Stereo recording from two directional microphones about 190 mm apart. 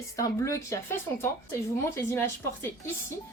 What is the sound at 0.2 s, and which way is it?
A woman's voice, 15° left (ahead or behind).